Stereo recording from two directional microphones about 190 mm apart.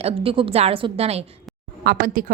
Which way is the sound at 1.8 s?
50° right (ahead or behind).